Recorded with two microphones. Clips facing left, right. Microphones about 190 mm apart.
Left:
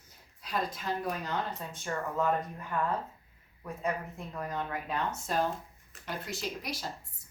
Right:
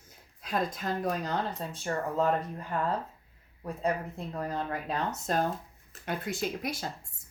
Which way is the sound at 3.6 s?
35° right (ahead or behind).